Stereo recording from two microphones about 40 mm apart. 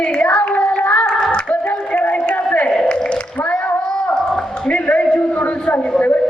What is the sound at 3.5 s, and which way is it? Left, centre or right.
Child singing, left.